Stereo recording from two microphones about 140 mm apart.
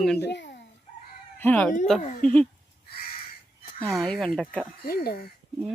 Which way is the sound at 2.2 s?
10° left (ahead or behind).